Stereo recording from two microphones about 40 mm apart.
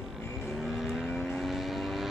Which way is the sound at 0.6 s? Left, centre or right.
Centre.